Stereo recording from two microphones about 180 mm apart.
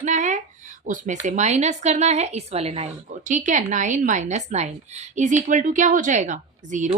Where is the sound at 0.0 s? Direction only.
40° right (ahead or behind).